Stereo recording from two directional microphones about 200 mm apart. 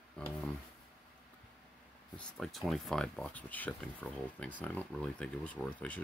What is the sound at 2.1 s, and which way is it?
Speech, 5° left (ahead or behind).